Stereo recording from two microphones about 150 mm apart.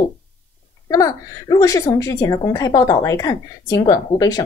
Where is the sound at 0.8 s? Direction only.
25° left (ahead or behind).